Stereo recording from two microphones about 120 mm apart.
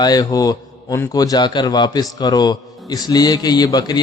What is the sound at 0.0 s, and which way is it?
A man's voice, 30° left (ahead or behind).